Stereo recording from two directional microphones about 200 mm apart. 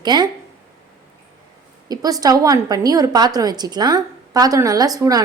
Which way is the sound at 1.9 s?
20° right (ahead or behind).